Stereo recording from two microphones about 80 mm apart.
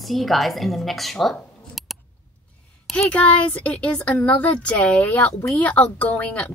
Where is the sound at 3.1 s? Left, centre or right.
Centre.